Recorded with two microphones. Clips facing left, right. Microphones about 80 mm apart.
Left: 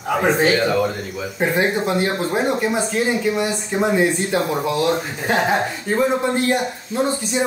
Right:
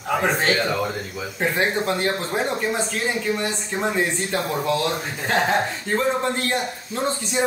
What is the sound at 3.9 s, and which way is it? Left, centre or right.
Speech, centre.